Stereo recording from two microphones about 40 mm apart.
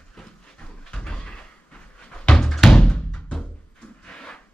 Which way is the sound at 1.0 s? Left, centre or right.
Left.